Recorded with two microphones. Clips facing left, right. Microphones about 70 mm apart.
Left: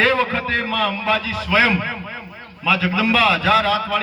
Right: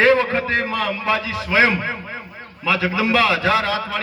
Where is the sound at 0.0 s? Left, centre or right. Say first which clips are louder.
Right 2 dB; right.